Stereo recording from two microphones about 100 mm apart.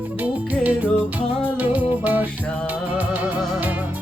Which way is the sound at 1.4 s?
15° right (ahead or behind).